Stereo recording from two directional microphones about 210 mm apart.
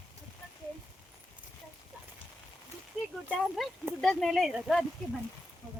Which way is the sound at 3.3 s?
5° right (ahead or behind).